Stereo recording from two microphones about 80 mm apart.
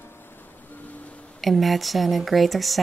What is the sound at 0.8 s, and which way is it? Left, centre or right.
Music, centre.